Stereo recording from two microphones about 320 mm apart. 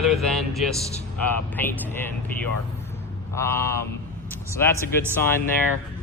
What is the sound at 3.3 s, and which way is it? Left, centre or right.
Speech, centre.